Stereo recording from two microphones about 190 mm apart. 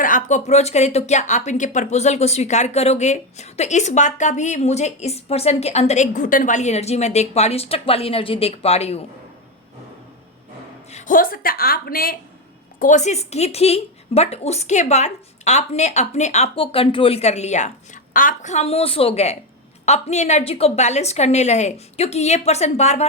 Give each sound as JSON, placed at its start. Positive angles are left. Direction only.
{"t": 0.0, "sound": "speech", "side_deg": 45}
{"t": 10.9, "sound": "a woman's voice", "side_deg": 45}
{"t": 12.8, "sound": "speech", "side_deg": 40}